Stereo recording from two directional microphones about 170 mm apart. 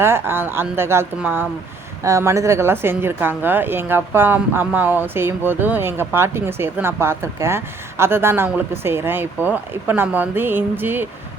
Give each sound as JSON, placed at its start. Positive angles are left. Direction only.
{"t": 0.0, "sound": "a woman's voice", "side_deg": -15}